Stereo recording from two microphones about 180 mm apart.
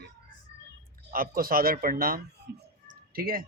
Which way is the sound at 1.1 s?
55° right (ahead or behind).